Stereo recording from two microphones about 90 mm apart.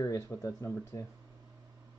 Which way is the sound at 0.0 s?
40° left (ahead or behind).